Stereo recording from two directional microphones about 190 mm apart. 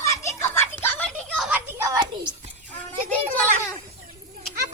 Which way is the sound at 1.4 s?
5° right (ahead or behind).